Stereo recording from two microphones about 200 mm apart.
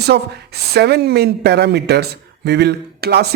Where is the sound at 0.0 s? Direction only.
55° right (ahead or behind).